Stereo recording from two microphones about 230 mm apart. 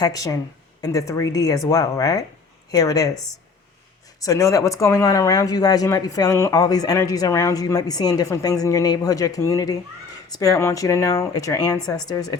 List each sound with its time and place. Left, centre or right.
0.0 s speech: centre
4.2 s speech: centre